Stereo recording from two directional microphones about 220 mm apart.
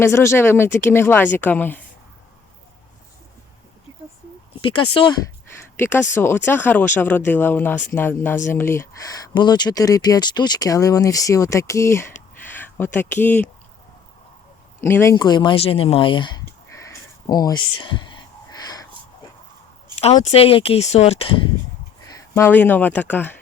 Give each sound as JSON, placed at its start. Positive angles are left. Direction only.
{"t": 0.0, "sound": "speech", "side_deg": 10}
{"t": 4.6, "sound": "speech", "side_deg": 25}
{"t": 5.5, "sound": "speech", "side_deg": 10}
{"t": 14.8, "sound": "speech", "side_deg": 10}
{"t": 16.8, "sound": "a sound", "side_deg": 15}
{"t": 20.1, "sound": "speech", "side_deg": 25}
{"t": 22.0, "sound": "speech", "side_deg": 15}